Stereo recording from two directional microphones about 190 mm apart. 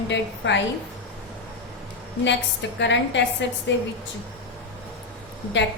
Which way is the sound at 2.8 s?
70° left (ahead or behind).